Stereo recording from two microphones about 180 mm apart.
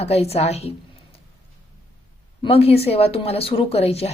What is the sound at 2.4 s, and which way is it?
A woman's voice, 35° left (ahead or behind).